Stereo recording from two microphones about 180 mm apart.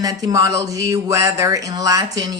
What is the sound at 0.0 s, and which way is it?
Speech, 20° right (ahead or behind).